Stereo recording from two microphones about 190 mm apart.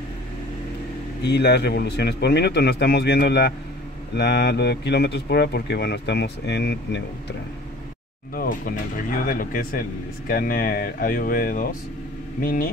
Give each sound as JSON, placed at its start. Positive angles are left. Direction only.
{"t": 1.2, "sound": "speech", "side_deg": 60}
{"t": 8.4, "sound": "speech", "side_deg": 45}